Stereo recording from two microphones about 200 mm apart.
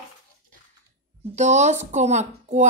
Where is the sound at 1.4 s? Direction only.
35° right (ahead or behind).